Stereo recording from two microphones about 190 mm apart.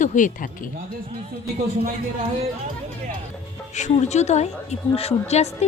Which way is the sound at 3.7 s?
35° left (ahead or behind).